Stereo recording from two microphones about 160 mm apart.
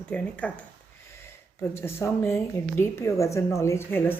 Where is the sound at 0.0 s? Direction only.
10° left (ahead or behind).